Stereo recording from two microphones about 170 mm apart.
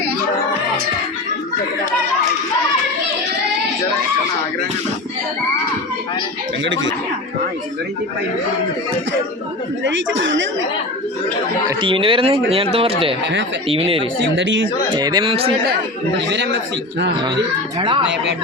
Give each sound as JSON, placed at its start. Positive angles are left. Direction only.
{"t": 9.8, "sound": "speech", "side_deg": -90}
{"t": 11.7, "sound": "speech", "side_deg": -30}
{"t": 14.2, "sound": "speech", "side_deg": -90}
{"t": 14.9, "sound": "speech", "side_deg": -25}
{"t": 16.3, "sound": "speech", "side_deg": -90}
{"t": 17.2, "sound": "speech", "side_deg": -25}